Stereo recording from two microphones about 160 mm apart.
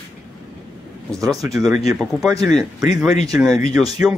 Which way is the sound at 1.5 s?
Centre (ahead or behind).